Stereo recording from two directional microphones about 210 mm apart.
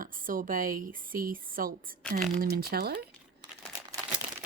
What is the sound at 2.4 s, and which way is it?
Speech, 45° right (ahead or behind).